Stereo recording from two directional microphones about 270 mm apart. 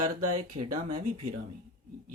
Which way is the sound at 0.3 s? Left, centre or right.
Right.